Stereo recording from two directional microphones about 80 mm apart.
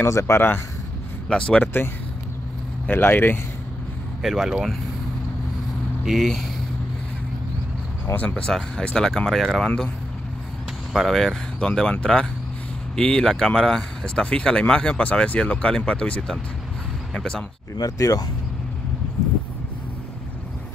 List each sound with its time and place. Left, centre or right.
0.0 s speech: left
1.3 s speech: centre
1.6 s speech: left
2.9 s speech: left
4.2 s speech: centre
6.0 s speech: centre
8.1 s speech: left
8.4 s speech: centre
10.9 s speech: centre
17.7 s speech: left